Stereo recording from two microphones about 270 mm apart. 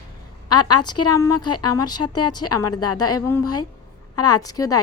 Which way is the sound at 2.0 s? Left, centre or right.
Left.